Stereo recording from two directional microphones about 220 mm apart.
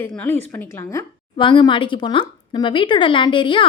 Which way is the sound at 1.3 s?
20° left (ahead or behind).